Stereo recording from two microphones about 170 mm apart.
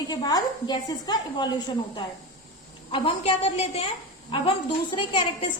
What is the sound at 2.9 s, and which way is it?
Speech, 35° left (ahead or behind).